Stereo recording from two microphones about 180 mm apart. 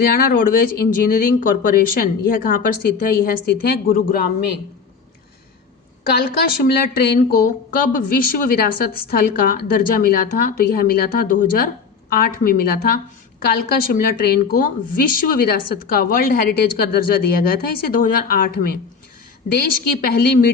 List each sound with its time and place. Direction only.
0.0 s a woman's voice: 55° left (ahead or behind)
6.1 s a woman's voice: 60° left (ahead or behind)